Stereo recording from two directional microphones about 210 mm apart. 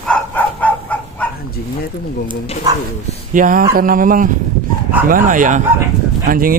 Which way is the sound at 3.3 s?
40° right (ahead or behind).